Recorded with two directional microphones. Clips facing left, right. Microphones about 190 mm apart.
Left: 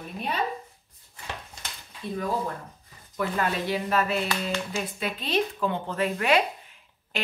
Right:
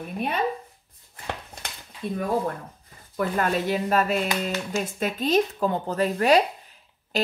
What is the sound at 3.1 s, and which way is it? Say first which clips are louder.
Speech: right 3 dB; 45° right (ahead or behind).